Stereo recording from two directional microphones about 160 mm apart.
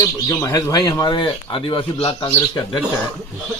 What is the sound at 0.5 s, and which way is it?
Speech, 25° left (ahead or behind).